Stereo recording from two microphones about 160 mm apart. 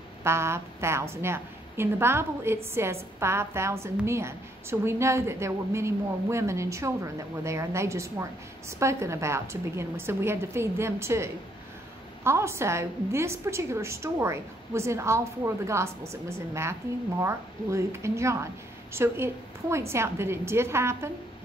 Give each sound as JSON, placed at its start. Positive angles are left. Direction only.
{"t": 0.2, "sound": "a woman's voice", "side_deg": -15}